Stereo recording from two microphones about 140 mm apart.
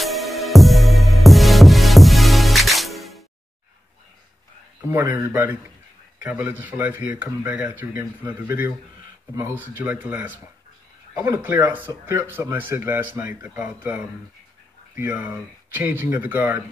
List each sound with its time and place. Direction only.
0.0 s music: centre (ahead or behind)
4.8 s speech: 15° right (ahead or behind)